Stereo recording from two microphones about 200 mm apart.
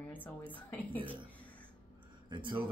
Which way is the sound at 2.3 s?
25° right (ahead or behind).